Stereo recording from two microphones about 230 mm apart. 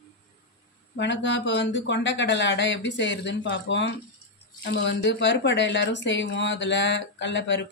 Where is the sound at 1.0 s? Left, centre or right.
Left.